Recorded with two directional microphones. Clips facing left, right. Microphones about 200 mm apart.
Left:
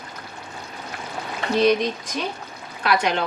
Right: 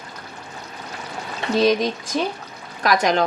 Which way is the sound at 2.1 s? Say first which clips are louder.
Right 5 dB; 35° right (ahead or behind).